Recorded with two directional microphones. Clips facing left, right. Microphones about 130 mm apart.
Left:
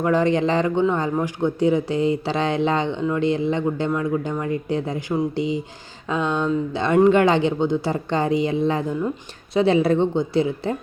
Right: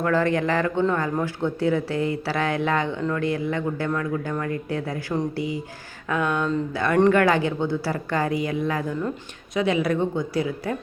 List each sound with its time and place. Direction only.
0.0 s speech: 20° left (ahead or behind)